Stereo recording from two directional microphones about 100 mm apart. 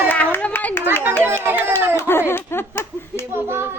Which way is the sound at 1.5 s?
20° right (ahead or behind).